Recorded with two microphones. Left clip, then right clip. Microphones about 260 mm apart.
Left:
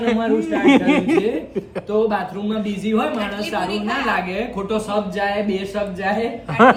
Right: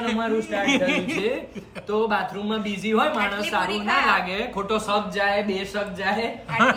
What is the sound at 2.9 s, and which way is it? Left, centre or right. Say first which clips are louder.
Speech: even; centre.